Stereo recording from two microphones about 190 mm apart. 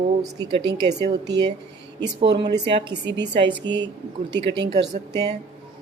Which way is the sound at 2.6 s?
25° right (ahead or behind).